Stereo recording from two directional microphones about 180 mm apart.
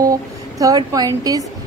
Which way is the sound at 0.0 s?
20° right (ahead or behind).